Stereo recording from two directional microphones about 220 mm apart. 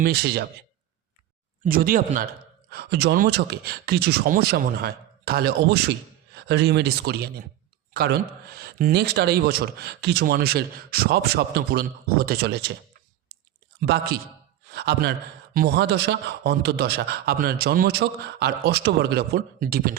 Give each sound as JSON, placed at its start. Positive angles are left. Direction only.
{"t": 0.0, "sound": "speech", "side_deg": -45}
{"t": 1.6, "sound": "speech", "side_deg": -40}
{"t": 13.8, "sound": "a man's voice", "side_deg": -45}